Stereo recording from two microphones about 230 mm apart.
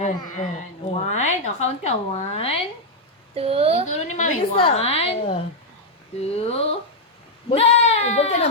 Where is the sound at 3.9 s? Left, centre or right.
Left.